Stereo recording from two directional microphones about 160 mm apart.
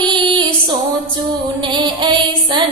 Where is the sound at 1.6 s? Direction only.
30° right (ahead or behind).